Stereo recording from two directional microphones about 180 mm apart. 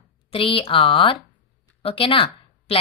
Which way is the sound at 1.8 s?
30° left (ahead or behind).